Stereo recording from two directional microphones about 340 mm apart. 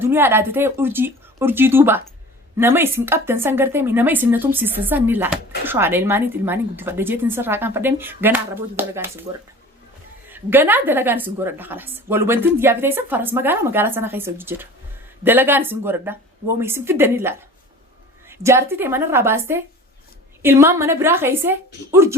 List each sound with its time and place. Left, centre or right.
0.0 s a woman's voice: centre